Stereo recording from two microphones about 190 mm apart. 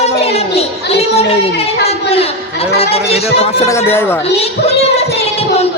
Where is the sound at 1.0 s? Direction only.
30° left (ahead or behind).